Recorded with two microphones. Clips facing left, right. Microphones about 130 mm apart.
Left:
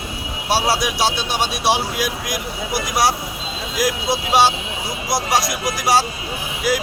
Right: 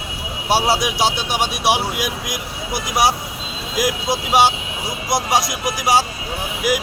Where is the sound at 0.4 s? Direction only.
20° right (ahead or behind).